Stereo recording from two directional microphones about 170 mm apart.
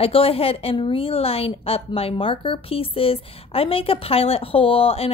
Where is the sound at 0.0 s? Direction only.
35° left (ahead or behind).